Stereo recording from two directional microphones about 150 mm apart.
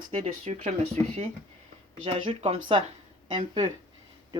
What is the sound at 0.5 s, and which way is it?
Speech, 50° right (ahead or behind).